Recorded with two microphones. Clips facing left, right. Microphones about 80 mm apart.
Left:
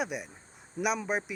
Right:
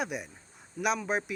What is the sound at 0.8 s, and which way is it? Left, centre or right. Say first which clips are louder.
Speech: even; left.